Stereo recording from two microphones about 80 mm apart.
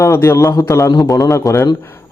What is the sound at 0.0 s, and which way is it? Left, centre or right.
Speech, left.